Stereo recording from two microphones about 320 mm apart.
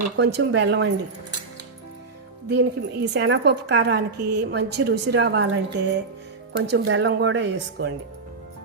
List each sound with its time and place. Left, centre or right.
0.2 s a woman's voice: right
2.5 s a woman's voice: right